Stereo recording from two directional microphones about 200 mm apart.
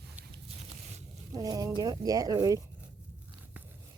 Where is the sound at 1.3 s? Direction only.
20° right (ahead or behind).